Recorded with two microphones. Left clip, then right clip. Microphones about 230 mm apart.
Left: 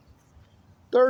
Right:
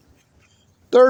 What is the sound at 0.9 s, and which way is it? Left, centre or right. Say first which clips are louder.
Speech: right 7 dB; right.